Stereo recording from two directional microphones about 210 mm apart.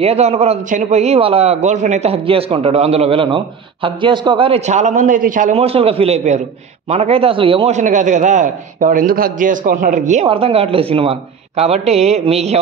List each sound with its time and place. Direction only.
0.0 s a man's voice: 30° right (ahead or behind)